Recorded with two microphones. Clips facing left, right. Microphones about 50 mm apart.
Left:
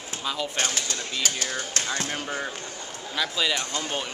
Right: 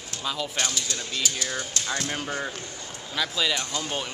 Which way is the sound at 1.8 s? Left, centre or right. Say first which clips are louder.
Left 2 dB; left.